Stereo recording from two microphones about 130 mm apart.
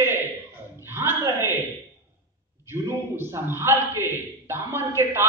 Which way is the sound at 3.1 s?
15° right (ahead or behind).